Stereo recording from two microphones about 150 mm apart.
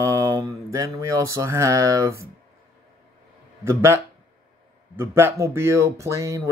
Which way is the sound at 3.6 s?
15° right (ahead or behind).